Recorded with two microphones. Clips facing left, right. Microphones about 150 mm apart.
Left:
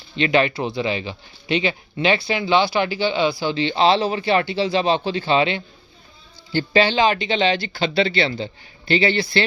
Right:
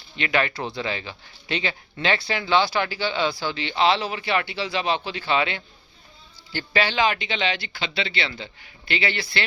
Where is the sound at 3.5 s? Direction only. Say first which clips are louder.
Left 4 dB; 30° left (ahead or behind).